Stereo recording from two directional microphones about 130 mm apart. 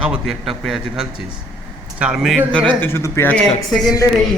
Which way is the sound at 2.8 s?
20° left (ahead or behind).